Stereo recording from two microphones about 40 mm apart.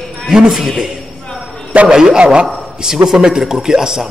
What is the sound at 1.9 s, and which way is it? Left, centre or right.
A man's voice, centre.